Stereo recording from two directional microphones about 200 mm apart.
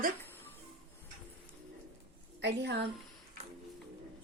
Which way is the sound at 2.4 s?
60° right (ahead or behind).